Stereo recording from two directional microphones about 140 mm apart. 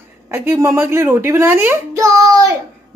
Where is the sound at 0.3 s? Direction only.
20° right (ahead or behind).